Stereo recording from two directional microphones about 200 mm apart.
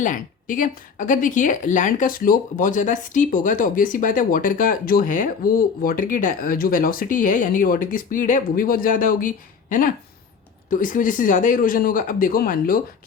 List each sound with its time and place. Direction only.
0.0 s speech: 40° left (ahead or behind)